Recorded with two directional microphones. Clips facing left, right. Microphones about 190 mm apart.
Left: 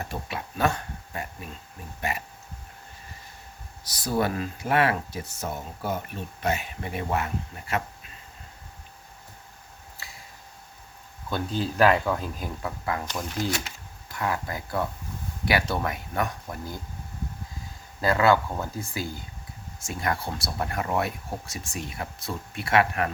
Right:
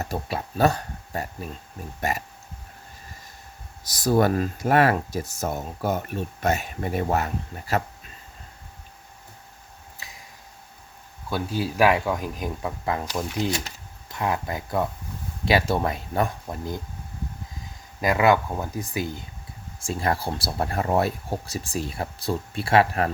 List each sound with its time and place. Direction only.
0.0 s a sound: 35° right (ahead or behind)
4.1 s speech: 45° right (ahead or behind)
11.3 s speech: 10° right (ahead or behind)
18.0 s speech: 15° right (ahead or behind)
19.8 s speech: 30° right (ahead or behind)